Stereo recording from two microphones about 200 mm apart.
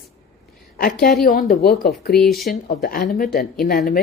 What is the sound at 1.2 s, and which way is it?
Speech, 45° left (ahead or behind).